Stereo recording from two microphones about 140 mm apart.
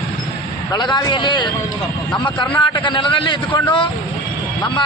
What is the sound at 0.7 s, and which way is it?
Speech, 30° left (ahead or behind).